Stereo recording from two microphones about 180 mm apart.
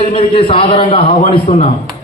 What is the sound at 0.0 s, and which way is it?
A man's voice, 30° left (ahead or behind).